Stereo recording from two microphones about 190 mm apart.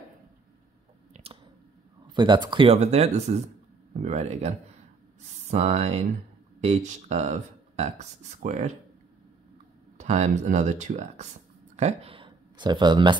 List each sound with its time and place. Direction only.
1.1 s a sound: 30° right (ahead or behind)
2.1 s speech: 25° right (ahead or behind)
9.9 s speech: 35° right (ahead or behind)